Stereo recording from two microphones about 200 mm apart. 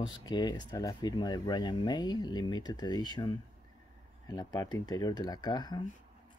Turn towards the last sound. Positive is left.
turn(degrees=20)  # may be behind; listen again after turning